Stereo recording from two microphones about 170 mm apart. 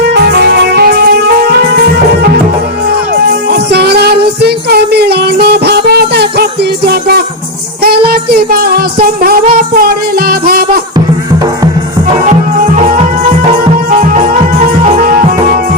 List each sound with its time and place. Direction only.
0.1 s music: 75° right (ahead or behind)
3.5 s music: 75° right (ahead or behind)
13.9 s music: 45° right (ahead or behind)